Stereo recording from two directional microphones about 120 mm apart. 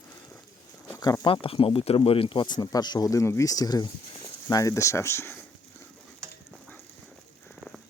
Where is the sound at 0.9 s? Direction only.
25° left (ahead or behind).